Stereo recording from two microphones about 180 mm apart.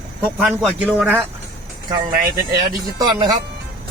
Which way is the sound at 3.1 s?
25° right (ahead or behind).